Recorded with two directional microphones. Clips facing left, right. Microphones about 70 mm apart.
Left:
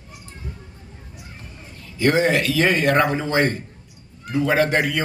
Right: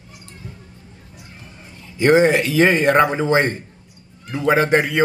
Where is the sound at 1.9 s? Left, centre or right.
Right.